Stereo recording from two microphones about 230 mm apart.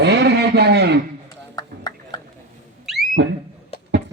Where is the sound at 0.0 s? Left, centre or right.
Right.